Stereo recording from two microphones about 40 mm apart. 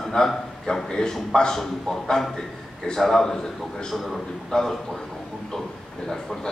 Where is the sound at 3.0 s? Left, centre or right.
Centre.